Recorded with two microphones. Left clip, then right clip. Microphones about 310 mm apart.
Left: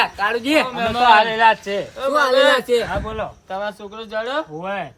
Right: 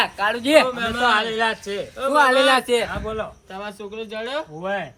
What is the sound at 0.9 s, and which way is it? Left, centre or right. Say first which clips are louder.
A man's voice: left 6 dB; left.